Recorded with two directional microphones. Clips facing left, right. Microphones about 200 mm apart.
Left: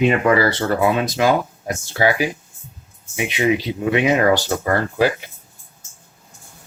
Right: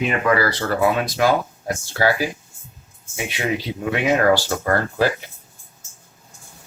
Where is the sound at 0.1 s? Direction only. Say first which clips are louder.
Left 3 dB; 25° left (ahead or behind).